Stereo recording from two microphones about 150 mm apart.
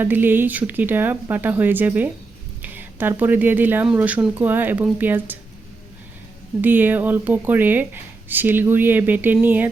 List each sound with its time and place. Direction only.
0.0 s speech: 15° right (ahead or behind)
6.6 s speech: 10° right (ahead or behind)